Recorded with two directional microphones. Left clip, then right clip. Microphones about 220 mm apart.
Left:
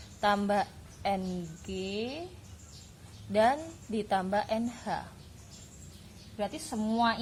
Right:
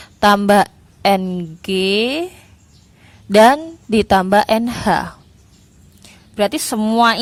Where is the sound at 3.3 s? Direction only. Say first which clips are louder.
Right 16 dB; 45° right (ahead or behind).